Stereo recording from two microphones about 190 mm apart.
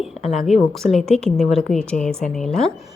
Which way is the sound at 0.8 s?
40° left (ahead or behind).